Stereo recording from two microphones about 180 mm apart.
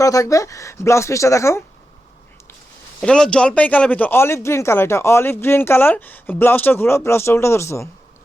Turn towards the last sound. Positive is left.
turn(degrees=15)  # may be behind; listen again after turning